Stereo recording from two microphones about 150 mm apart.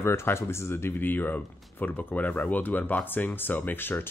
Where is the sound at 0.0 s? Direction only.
15° left (ahead or behind).